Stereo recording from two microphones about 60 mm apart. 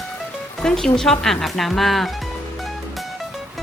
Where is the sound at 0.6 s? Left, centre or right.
Centre.